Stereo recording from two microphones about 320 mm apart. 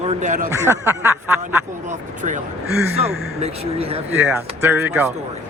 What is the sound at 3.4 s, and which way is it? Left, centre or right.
Speech, centre.